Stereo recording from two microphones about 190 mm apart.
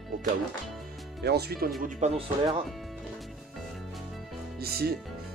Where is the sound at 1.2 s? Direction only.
55° right (ahead or behind).